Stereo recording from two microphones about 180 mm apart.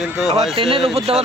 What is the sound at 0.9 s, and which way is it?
Speech, 35° right (ahead or behind).